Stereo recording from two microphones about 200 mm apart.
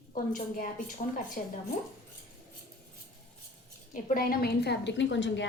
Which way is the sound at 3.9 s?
45° left (ahead or behind).